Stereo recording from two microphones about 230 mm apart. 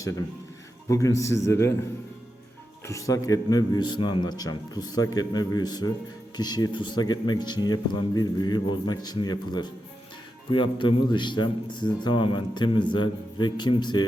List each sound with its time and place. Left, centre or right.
0.9 s a man's voice: centre
2.8 s a man's voice: centre